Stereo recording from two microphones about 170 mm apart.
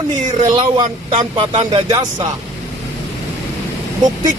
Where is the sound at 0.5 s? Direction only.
30° right (ahead or behind).